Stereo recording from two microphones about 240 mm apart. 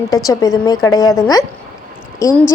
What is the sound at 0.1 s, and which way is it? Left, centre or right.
A woman's voice, centre.